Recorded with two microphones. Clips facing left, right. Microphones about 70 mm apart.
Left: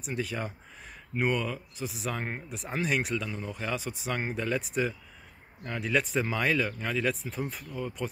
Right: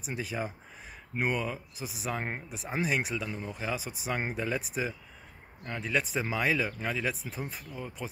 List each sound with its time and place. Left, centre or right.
0.0 s speech: centre